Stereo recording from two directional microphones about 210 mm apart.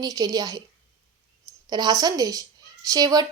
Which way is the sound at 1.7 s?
20° right (ahead or behind).